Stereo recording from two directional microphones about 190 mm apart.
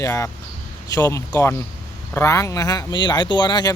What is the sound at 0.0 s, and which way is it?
Speech, 15° left (ahead or behind).